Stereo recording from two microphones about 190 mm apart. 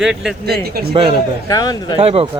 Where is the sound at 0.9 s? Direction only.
30° right (ahead or behind).